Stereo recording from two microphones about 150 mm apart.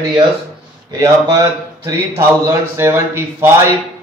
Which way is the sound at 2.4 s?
15° right (ahead or behind).